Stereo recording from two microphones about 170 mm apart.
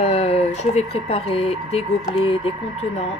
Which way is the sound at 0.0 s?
35° left (ahead or behind).